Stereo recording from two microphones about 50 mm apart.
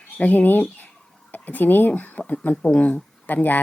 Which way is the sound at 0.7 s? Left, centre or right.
Left.